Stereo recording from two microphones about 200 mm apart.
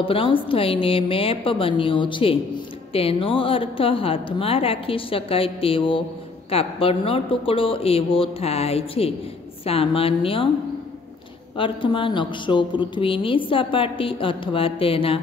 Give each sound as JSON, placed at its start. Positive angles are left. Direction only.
{"t": 0.0, "sound": "a woman's voice", "side_deg": 25}
{"t": 11.5, "sound": "a woman's voice", "side_deg": 25}